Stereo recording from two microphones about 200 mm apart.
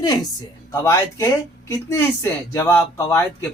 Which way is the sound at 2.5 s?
15° left (ahead or behind).